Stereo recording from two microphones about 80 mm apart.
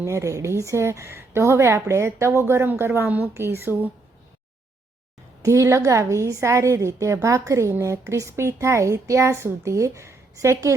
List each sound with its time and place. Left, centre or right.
0.0 s a woman's voice: right
5.4 s a woman's voice: right